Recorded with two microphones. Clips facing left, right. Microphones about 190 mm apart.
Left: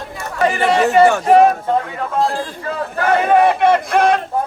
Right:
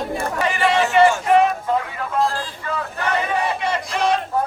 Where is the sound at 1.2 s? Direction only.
40° left (ahead or behind).